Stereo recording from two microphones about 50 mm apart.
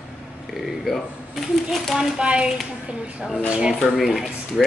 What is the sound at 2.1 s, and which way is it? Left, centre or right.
Speech, centre.